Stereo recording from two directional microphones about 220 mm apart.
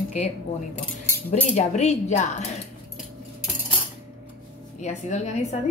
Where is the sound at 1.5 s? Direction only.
30° left (ahead or behind).